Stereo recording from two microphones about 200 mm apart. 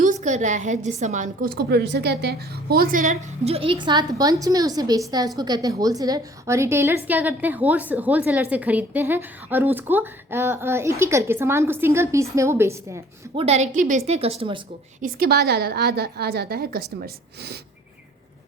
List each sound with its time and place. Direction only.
0.0 s a woman's voice: 35° right (ahead or behind); by 13.0 s 15° right (ahead or behind)
13.3 s a woman's voice: 30° right (ahead or behind)
15.0 s a woman's voice: 50° right (ahead or behind)